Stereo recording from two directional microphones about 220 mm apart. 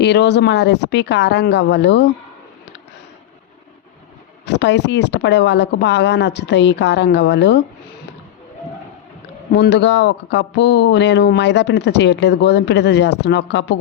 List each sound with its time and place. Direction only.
0.0 s speech: 50° left (ahead or behind)
4.4 s speech: 50° left (ahead or behind)
9.5 s speech: 50° left (ahead or behind)